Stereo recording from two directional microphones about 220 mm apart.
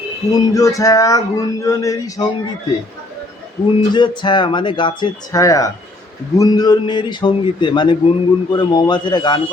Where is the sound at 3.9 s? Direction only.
20° left (ahead or behind).